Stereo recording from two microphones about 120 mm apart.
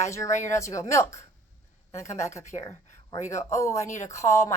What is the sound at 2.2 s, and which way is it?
Speech, 25° left (ahead or behind).